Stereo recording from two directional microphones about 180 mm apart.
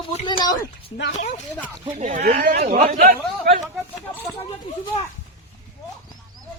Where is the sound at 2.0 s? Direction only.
40° right (ahead or behind).